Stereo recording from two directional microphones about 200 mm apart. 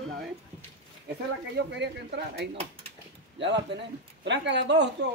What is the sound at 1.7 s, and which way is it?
Speech, 60° right (ahead or behind).